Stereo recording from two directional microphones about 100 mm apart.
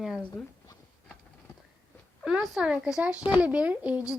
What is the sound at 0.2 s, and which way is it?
Speech, 15° left (ahead or behind).